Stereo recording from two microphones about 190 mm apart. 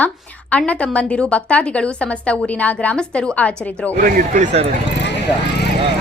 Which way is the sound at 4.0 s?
45° right (ahead or behind).